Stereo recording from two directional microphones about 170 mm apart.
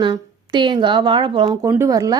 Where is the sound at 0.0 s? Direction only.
25° right (ahead or behind).